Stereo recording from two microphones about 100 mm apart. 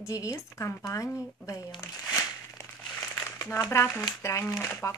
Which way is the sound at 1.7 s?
35° left (ahead or behind).